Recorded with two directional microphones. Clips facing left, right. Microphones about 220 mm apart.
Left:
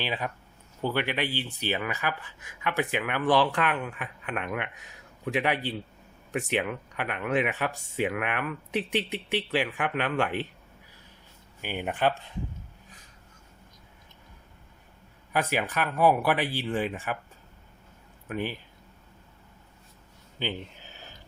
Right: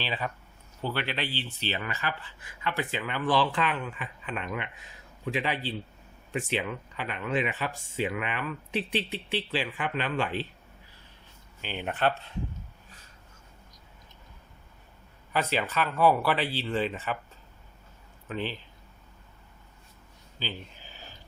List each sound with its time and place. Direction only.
0.0 s speech: 10° left (ahead or behind)
11.6 s speech: 10° left (ahead or behind)
15.3 s speech: 15° left (ahead or behind)
18.3 s speech: 10° left (ahead or behind)
20.4 s speech: 20° left (ahead or behind)